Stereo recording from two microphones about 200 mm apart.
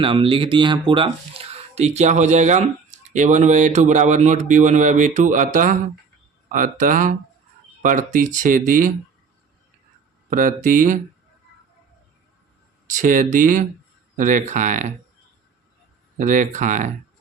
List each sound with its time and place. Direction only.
0.0 s speech: 25° right (ahead or behind); by 8.9 s 40° right (ahead or behind)
10.2 s speech: 40° right (ahead or behind)
12.9 s speech: 40° right (ahead or behind)
16.1 s speech: 40° right (ahead or behind)